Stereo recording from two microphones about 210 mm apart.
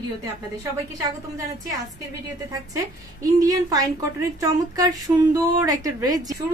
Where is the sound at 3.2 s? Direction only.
15° right (ahead or behind).